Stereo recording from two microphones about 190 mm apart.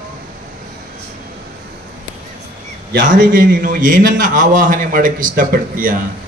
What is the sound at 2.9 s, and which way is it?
A man's voice, 50° right (ahead or behind).